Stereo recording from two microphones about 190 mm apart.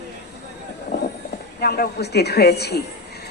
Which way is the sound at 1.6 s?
55° left (ahead or behind).